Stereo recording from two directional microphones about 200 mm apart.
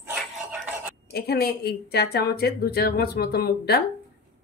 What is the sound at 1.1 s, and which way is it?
Speech, 50° left (ahead or behind).